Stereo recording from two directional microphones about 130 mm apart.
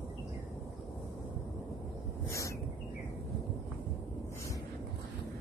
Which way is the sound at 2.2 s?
25° left (ahead or behind).